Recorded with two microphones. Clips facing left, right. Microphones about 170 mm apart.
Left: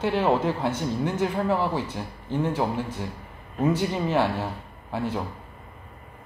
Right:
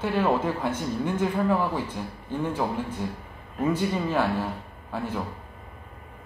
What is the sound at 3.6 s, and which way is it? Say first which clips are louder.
Speech: left 1 dB; 15° left (ahead or behind).